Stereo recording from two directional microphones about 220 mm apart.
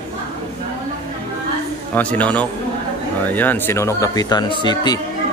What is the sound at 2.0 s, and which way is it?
Speech, 5° left (ahead or behind).